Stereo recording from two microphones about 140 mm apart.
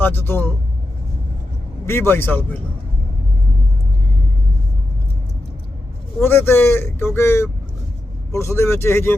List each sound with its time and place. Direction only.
0.2 s speech: 15° left (ahead or behind)
1.9 s speech: 15° left (ahead or behind)
6.2 s speech: 15° left (ahead or behind)